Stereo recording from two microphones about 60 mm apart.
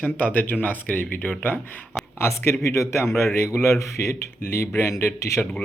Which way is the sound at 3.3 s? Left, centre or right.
Left.